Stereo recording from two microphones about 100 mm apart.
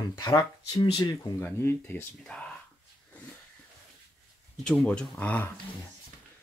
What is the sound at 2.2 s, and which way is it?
Speech, 10° left (ahead or behind).